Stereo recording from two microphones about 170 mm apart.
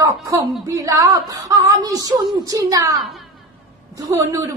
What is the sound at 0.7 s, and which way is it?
A woman's voice, 20° right (ahead or behind).